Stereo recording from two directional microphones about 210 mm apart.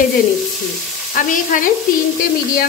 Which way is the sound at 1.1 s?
40° left (ahead or behind).